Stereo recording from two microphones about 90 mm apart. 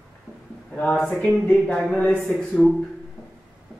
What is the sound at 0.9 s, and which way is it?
Speech, 5° left (ahead or behind).